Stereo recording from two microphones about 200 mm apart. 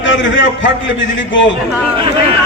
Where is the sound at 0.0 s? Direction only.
70° left (ahead or behind).